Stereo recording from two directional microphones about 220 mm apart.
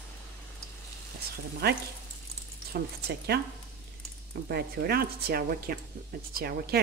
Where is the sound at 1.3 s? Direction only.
45° right (ahead or behind).